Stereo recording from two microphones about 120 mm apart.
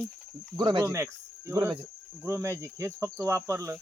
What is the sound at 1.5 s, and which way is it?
Cricket, 20° right (ahead or behind).